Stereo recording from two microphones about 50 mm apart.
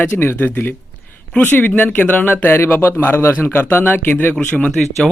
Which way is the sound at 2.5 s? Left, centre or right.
Left.